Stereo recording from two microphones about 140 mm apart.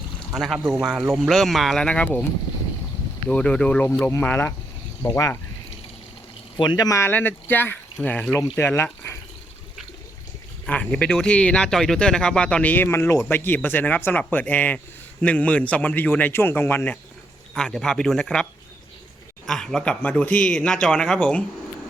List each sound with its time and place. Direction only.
0.3 s speech: centre (ahead or behind)
3.2 s speech: 5° left (ahead or behind)
6.6 s speech: 30° left (ahead or behind)
10.7 s speech: 5° left (ahead or behind)
19.5 s speech: 5° left (ahead or behind)